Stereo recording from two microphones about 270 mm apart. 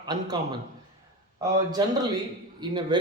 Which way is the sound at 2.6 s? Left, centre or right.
Centre.